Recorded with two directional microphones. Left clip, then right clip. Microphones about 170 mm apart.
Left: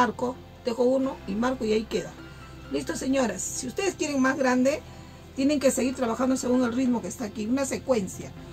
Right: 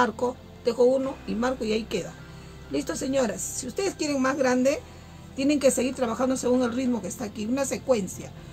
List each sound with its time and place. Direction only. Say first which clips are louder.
0.0 s a woman's voice: right 1 dB; 30° right (ahead or behind)